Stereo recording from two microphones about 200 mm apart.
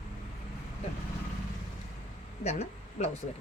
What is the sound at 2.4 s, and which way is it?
Speech, 35° left (ahead or behind).